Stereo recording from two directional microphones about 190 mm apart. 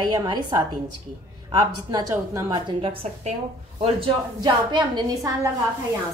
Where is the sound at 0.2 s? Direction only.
25° right (ahead or behind).